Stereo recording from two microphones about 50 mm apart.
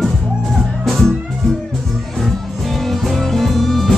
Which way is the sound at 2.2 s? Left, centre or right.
Centre.